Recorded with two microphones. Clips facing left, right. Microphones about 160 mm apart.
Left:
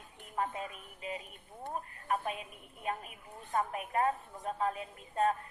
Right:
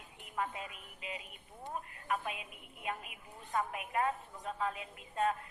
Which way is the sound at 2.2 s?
40° left (ahead or behind).